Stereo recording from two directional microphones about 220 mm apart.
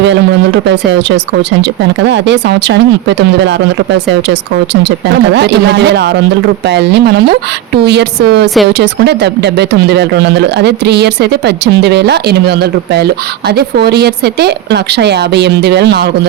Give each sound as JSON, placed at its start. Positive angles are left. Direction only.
{"t": 0.6, "sound": "speech", "side_deg": -50}